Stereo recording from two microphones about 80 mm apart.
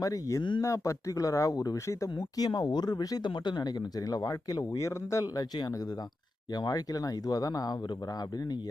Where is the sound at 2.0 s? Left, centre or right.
Left.